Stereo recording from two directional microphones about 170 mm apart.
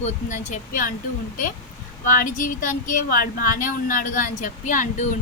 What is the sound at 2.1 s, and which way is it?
A woman's voice, 55° left (ahead or behind).